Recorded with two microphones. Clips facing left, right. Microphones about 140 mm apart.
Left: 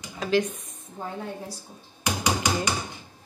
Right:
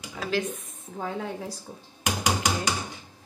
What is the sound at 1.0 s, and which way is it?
Speech, 90° right.